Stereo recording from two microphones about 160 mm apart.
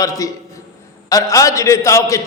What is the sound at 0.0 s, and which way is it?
A man's voice, 20° left (ahead or behind).